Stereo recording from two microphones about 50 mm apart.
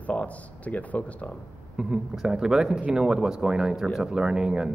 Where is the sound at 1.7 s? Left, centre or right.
Centre.